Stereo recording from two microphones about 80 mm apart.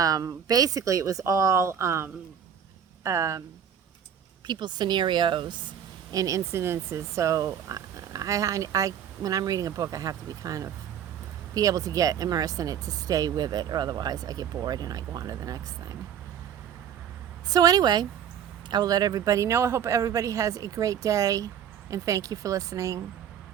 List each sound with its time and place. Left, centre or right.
0.0 s speech: right
4.4 s speech: right
6.1 s speech: right
6.5 s speech: right
17.5 s speech: right
19.5 s speech: right